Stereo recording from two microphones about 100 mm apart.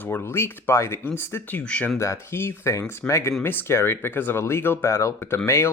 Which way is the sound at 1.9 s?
25° left (ahead or behind).